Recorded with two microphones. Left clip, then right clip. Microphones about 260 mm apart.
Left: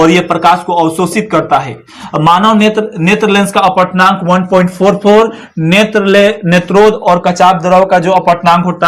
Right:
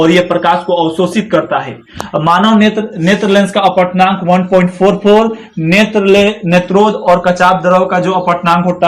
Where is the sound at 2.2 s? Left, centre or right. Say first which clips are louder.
Left 3 dB; left.